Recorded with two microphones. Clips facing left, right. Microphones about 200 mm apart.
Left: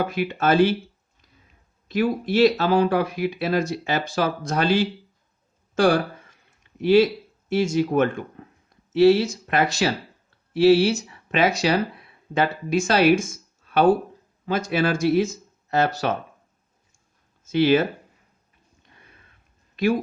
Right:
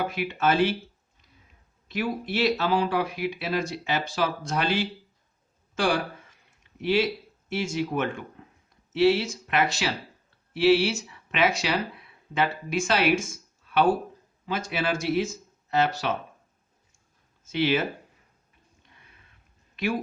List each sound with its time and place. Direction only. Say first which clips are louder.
0.2 s speech: left 4 dB; 40° left (ahead or behind)
1.9 s speech: left 7 dB; 40° left (ahead or behind)
5.7 s speech: left 7 dB; 40° left (ahead or behind)
17.5 s speech: left 7 dB; 40° left (ahead or behind)